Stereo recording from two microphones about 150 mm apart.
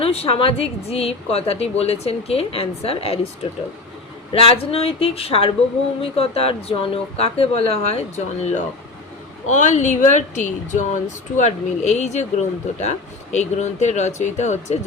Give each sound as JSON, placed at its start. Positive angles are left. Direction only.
{"t": 0.0, "sound": "speech", "side_deg": 40}
{"t": 4.3, "sound": "speech", "side_deg": 40}